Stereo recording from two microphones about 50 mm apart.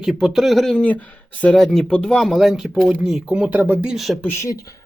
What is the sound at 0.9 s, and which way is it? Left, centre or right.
Speech, left.